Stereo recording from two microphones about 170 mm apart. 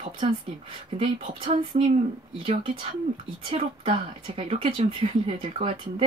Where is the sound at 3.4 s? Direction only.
35° right (ahead or behind).